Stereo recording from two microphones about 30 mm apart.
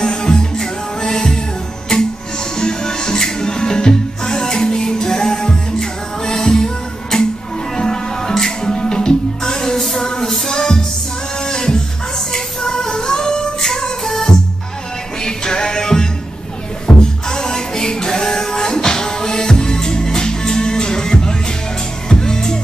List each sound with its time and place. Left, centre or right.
0.0 s music: left
13.6 s music: centre